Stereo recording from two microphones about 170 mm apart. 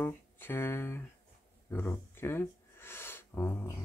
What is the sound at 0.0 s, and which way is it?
Speech, 10° left (ahead or behind).